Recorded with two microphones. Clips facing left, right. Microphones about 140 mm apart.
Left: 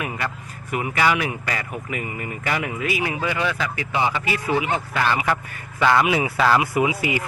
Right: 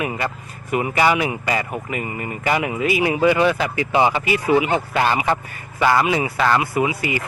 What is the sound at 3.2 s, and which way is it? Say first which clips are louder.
Speech: right 8 dB; 30° right (ahead or behind).